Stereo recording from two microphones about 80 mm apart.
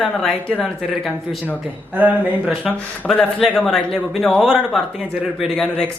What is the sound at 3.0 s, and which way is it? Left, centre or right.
A woman's voice, centre.